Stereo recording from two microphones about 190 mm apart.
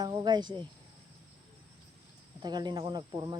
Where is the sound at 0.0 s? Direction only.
20° right (ahead or behind).